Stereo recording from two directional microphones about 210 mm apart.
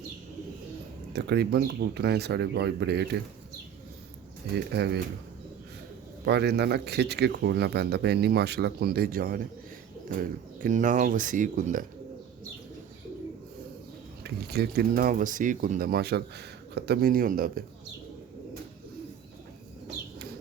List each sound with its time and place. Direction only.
1.1 s speech: 50° right (ahead or behind)
4.5 s speech: 50° right (ahead or behind)
6.2 s speech: 50° right (ahead or behind)
10.6 s speech: 40° right (ahead or behind)
14.3 s speech: 50° right (ahead or behind)